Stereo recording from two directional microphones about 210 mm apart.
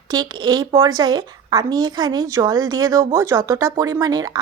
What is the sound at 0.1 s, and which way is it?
Speech, 20° right (ahead or behind).